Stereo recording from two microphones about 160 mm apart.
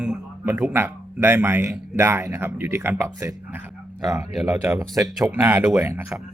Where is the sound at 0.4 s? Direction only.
15° right (ahead or behind).